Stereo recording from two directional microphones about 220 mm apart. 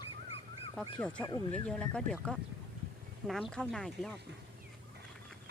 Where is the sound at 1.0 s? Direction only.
5° left (ahead or behind).